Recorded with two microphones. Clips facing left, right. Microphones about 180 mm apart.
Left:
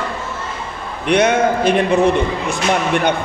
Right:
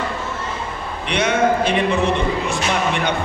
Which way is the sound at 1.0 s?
45° left (ahead or behind).